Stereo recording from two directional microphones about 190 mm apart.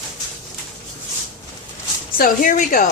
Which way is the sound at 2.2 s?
45° left (ahead or behind).